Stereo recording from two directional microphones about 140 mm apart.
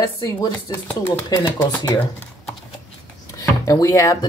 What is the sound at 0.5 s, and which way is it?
Speech, 10° left (ahead or behind).